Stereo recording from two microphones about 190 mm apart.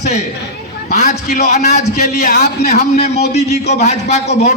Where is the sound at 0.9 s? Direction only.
40° left (ahead or behind).